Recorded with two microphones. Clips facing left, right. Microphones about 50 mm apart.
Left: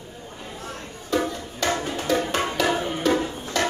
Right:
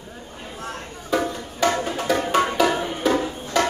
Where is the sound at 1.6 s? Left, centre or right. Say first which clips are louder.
Right 4 dB; centre.